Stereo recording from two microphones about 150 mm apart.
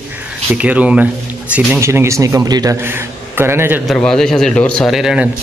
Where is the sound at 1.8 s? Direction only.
20° right (ahead or behind).